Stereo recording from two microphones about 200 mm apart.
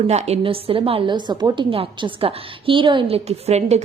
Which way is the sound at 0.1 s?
35° right (ahead or behind).